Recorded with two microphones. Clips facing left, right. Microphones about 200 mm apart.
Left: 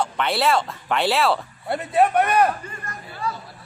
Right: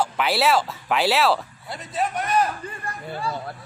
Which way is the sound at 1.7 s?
60° left (ahead or behind).